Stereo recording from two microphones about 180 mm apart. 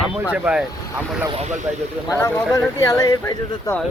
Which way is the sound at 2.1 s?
15° left (ahead or behind).